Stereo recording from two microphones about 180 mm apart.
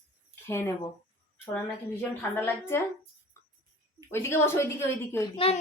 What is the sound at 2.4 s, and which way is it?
Speech, 15° left (ahead or behind).